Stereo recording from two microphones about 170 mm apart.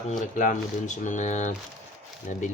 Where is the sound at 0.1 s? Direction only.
50° left (ahead or behind).